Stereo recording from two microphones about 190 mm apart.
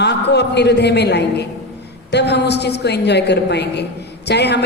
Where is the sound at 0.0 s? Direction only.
60° left (ahead or behind).